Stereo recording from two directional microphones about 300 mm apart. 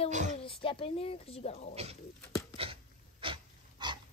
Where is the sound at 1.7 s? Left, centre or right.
Right.